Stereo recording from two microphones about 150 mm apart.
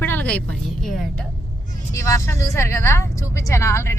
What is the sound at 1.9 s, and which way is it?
Speech, 20° left (ahead or behind).